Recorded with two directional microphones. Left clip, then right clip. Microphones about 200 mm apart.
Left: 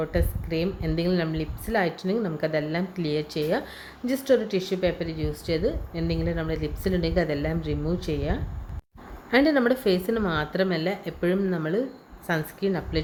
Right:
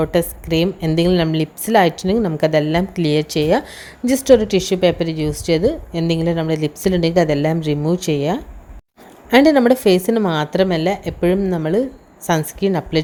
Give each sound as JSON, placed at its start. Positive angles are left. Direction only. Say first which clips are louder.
{"t": 0.0, "sound": "a woman's voice", "louder": "right 10 dB", "side_deg": -40}